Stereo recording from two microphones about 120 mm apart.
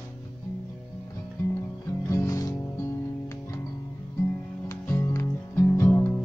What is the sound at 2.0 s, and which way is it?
Music, 25° left (ahead or behind).